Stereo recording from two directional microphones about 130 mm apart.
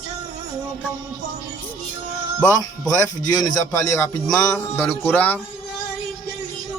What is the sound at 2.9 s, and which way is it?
Speech, 30° left (ahead or behind).